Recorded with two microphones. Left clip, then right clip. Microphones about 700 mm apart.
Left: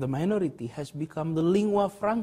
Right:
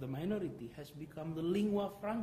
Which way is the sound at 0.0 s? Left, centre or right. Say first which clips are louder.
Left 12 dB; left.